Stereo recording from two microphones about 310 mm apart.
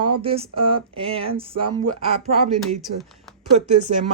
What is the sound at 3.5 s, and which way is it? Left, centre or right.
Speech, right.